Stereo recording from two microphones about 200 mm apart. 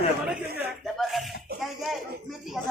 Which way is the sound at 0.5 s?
Centre (ahead or behind).